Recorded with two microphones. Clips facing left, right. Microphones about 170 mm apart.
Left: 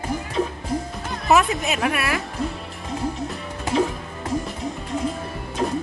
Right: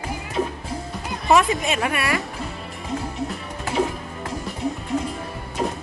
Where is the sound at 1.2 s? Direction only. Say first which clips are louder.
Right 1 dB; centre (ahead or behind).